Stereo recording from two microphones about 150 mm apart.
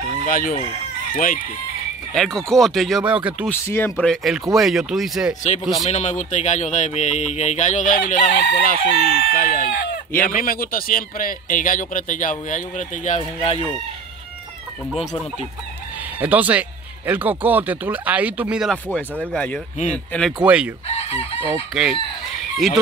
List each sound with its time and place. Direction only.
0.3 s chicken: 70° left (ahead or behind)
1.1 s speech: 65° left (ahead or behind)
2.1 s speech: centre (ahead or behind)
3.4 s speech: 15° left (ahead or behind)
4.0 s speech: centre (ahead or behind)
5.9 s speech: 50° left (ahead or behind); by 8.9 s 80° left
8.9 s speech: 45° right (ahead or behind)
9.3 s speech: 65° left (ahead or behind); by 13.6 s 50° left (ahead or behind)
15.0 s speech: 45° left (ahead or behind)
16.2 s speech: 10° right (ahead or behind)
18.7 s speech: 10° left (ahead or behind)
20.4 s speech: 10° right (ahead or behind)
20.9 s chicken: 45° left (ahead or behind)
21.7 s speech: 5° right (ahead or behind)